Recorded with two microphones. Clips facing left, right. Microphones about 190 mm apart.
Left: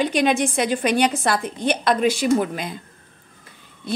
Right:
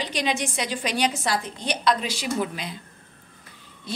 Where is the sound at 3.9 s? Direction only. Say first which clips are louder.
Left 7 dB; 55° left (ahead or behind).